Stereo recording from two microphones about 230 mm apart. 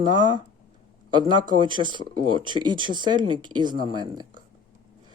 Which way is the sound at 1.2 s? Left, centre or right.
Centre.